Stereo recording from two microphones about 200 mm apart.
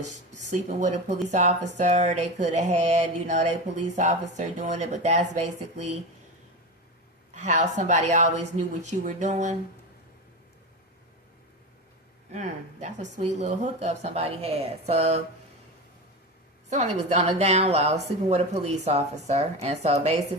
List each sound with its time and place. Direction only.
0.1 s a woman's voice: 35° right (ahead or behind)
7.3 s a woman's voice: 35° right (ahead or behind)
12.3 s a woman's voice: 35° right (ahead or behind)
16.6 s a woman's voice: 35° right (ahead or behind)